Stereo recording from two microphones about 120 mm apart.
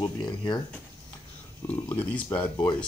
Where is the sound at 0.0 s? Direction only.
40° left (ahead or behind).